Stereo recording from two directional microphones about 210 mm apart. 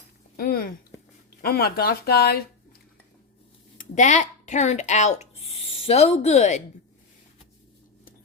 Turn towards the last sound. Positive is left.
turn(degrees=35)  # may be behind; listen again after turning